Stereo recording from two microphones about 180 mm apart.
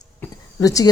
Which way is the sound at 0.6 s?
20° left (ahead or behind).